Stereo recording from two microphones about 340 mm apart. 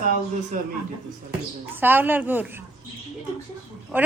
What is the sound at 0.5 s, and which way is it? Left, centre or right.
Speech, right.